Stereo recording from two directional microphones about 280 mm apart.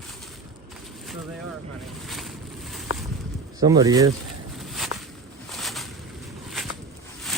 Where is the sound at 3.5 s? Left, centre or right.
Centre.